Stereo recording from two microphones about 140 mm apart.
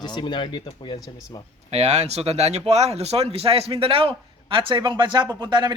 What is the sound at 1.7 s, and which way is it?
Speech, 50° right (ahead or behind).